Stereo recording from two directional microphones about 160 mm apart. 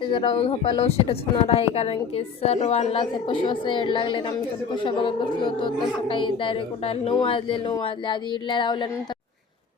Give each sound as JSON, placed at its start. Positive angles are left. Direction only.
{"t": 0.1, "sound": "a woman's voice", "side_deg": 35}